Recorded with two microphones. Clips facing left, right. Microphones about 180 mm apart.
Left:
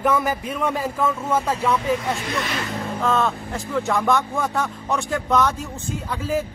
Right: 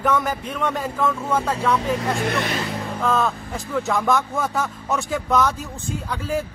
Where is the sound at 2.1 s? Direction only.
55° right (ahead or behind).